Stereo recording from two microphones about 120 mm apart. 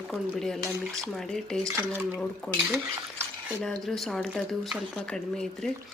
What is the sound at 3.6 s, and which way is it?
Speech, 5° left (ahead or behind).